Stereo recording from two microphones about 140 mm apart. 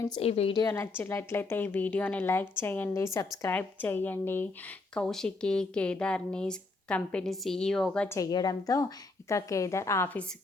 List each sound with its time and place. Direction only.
0.2 s a woman's voice: 45° left (ahead or behind)
0.6 s speech: 20° left (ahead or behind)
8.1 s a woman's voice: 25° left (ahead or behind)